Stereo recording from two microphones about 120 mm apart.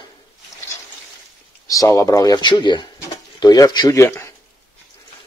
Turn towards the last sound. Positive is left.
turn(degrees=20)  # may be behind; listen again after turning